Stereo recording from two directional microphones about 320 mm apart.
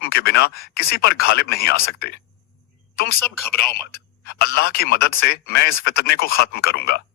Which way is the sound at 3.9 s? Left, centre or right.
Left.